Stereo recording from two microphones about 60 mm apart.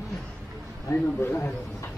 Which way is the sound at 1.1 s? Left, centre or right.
Left.